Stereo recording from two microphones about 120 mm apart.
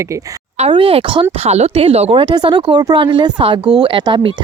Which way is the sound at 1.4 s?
65° right (ahead or behind).